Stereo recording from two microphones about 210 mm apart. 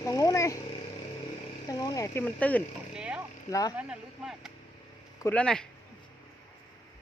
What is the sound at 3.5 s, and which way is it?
Speech, 15° left (ahead or behind).